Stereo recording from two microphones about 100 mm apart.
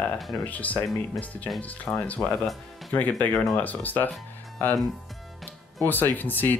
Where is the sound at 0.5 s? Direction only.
15° left (ahead or behind).